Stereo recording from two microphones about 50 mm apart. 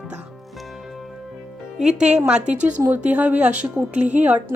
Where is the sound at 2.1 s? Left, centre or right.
Centre.